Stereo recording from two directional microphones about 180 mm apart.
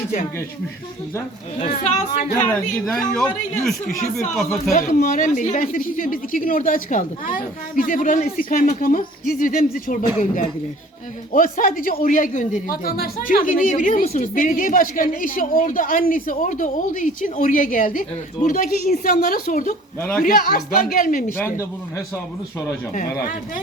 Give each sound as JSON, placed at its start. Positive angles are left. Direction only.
{"t": 1.5, "sound": "speech", "side_deg": 40}
{"t": 2.5, "sound": "speech", "side_deg": 10}
{"t": 4.7, "sound": "speech", "side_deg": 50}
{"t": 11.3, "sound": "speech", "side_deg": 50}
{"t": 21.3, "sound": "a man's voice", "side_deg": 15}